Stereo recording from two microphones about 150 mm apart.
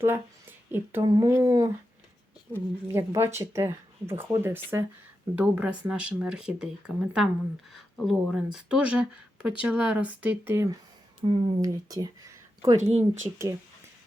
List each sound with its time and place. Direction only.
0.0 s speech: 15° right (ahead or behind)
1.0 s a sound: 25° right (ahead or behind)
2.9 s speech: 20° right (ahead or behind)
11.2 s speech: 30° right (ahead or behind)
12.7 s speech: 50° right (ahead or behind)